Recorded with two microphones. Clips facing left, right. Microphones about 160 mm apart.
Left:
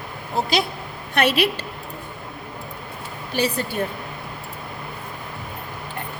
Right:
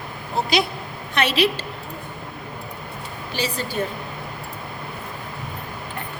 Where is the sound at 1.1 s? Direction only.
55° left (ahead or behind).